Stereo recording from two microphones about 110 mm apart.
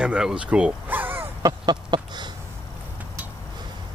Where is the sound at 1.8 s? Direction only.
45° right (ahead or behind).